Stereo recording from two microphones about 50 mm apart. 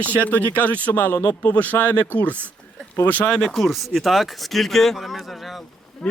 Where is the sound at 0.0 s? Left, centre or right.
Left.